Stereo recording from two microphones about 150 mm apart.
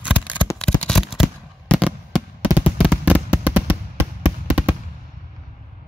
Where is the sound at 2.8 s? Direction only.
10° right (ahead or behind).